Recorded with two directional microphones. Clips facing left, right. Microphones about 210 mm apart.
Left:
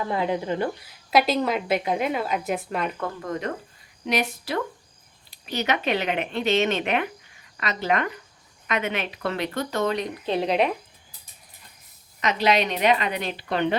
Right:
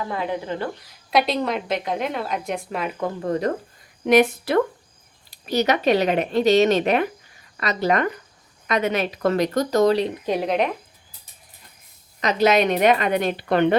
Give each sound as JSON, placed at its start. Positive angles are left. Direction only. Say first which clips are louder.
{"t": 0.3, "sound": "speech", "louder": "left 1 dB", "side_deg": 15}
{"t": 1.1, "sound": "a woman's voice", "louder": "even", "side_deg": 0}
{"t": 3.2, "sound": "speech", "louder": "right 10 dB", "side_deg": -35}
{"t": 4.0, "sound": "a woman's voice", "louder": "right 10 dB", "side_deg": -50}
{"t": 5.3, "sound": "speech", "louder": "right 6 dB", "side_deg": -40}
{"t": 10.2, "sound": "speech", "louder": "right 1 dB", "side_deg": -10}
{"t": 12.2, "sound": "a woman's voice", "louder": "right 4 dB", "side_deg": -40}